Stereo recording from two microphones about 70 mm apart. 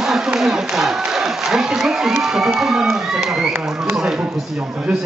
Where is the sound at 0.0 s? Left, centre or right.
Centre.